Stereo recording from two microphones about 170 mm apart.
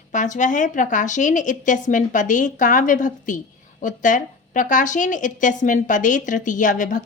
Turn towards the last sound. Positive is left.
turn(degrees=50)  # may be behind; listen again after turning